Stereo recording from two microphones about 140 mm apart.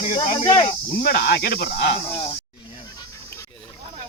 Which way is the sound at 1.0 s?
90° left.